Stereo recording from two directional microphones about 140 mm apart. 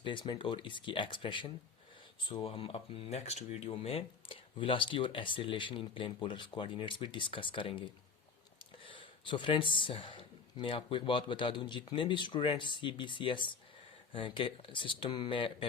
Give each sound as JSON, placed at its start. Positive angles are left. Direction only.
{"t": 0.0, "sound": "speech", "side_deg": 35}